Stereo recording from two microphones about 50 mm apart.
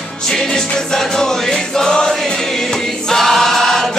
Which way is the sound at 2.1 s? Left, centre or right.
Centre.